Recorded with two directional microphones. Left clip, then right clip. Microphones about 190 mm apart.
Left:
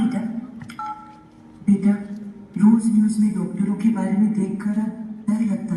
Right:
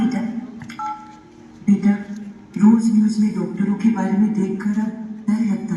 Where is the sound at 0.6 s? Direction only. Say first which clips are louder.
Right 4 dB; 40° left (ahead or behind).